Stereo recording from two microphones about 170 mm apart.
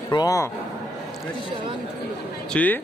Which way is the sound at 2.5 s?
10° left (ahead or behind).